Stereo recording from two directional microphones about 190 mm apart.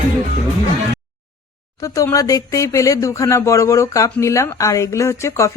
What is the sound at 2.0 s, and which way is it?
Speech, 15° left (ahead or behind).